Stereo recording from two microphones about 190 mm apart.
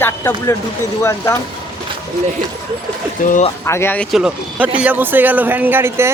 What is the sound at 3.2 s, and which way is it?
Speech, 40° left (ahead or behind).